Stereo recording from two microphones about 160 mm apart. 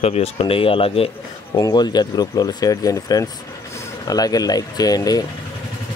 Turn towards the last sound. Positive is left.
turn(degrees=25)  # may be behind; listen again after turning